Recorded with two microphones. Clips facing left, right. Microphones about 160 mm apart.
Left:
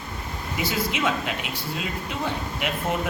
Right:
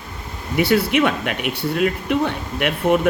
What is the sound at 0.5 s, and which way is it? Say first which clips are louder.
Speech: right 10 dB; 65° right (ahead or behind).